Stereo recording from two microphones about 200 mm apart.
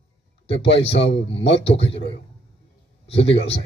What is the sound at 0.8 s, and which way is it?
A man's voice, 60° left (ahead or behind).